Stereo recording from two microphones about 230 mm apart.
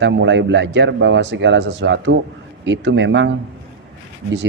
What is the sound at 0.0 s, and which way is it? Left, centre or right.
A man's voice, right.